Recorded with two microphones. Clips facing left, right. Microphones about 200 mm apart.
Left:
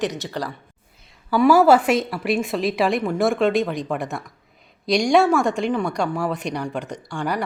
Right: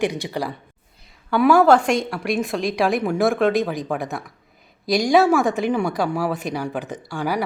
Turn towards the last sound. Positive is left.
turn(degrees=-5)  # may be behind; listen again after turning